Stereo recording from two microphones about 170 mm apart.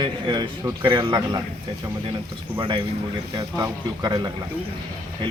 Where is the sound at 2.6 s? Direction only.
30° right (ahead or behind).